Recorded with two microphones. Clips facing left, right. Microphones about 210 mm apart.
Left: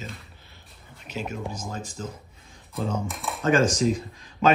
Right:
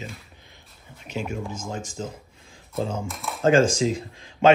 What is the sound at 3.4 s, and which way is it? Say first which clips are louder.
Speech: right 3 dB; 90° right.